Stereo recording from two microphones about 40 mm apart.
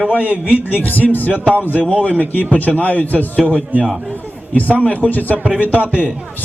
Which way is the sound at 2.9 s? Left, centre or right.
Right.